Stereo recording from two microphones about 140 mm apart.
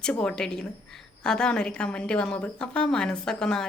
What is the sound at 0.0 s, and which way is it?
A woman's voice, 5° left (ahead or behind).